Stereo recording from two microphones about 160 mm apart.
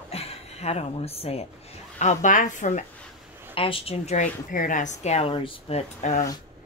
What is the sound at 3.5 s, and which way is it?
Speech, 35° left (ahead or behind).